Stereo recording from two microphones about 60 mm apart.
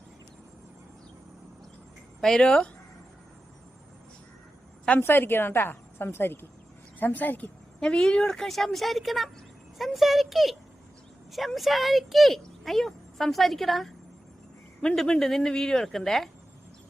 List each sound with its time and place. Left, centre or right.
2.2 s speech: centre
4.9 s a woman's voice: left
7.8 s speech: centre